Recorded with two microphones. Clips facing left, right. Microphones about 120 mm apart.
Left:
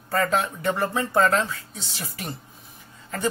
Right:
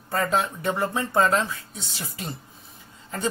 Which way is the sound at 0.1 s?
20° right (ahead or behind).